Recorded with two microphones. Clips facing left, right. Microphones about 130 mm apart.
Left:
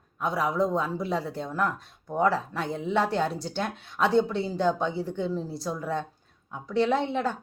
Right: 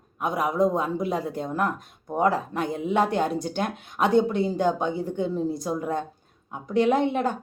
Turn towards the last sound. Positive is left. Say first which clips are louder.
# right 4 dB
turn(degrees=-15)  # may be behind; listen again after turning